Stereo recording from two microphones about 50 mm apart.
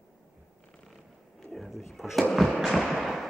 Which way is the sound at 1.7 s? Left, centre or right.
Centre.